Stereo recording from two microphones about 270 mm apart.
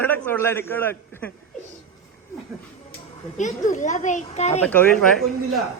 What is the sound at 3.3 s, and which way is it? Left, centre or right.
A child's voice, left.